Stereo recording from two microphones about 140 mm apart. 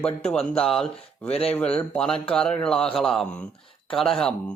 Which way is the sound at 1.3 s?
45° left (ahead or behind).